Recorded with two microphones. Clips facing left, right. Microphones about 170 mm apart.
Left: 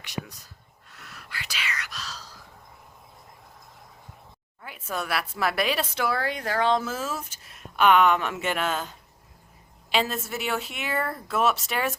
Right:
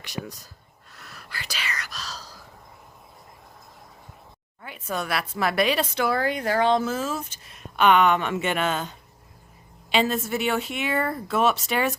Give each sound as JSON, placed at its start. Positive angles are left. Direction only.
{"t": 0.0, "sound": "speech", "side_deg": -35}
{"t": 0.9, "sound": "whispering", "side_deg": -35}
{"t": 4.6, "sound": "speech", "side_deg": 5}